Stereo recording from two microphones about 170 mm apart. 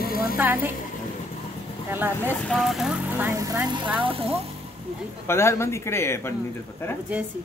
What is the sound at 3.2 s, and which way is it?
Speech, 20° right (ahead or behind).